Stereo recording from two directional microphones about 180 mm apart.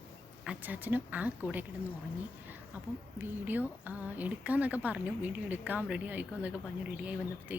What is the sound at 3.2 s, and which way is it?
A woman's voice, 10° right (ahead or behind).